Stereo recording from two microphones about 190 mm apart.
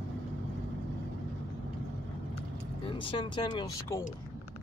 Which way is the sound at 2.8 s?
25° left (ahead or behind).